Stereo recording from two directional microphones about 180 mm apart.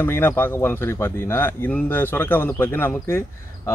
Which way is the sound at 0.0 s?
10° left (ahead or behind).